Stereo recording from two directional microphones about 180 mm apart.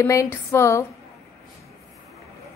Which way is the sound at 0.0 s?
15° left (ahead or behind).